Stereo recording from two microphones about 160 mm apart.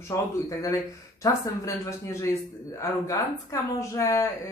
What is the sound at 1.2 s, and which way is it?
Speech, 20° left (ahead or behind).